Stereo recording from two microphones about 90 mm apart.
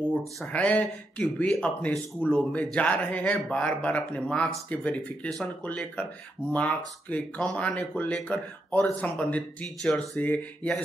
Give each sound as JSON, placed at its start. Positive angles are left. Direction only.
{"t": 0.5, "sound": "speech", "side_deg": 15}
{"t": 6.5, "sound": "speech", "side_deg": 15}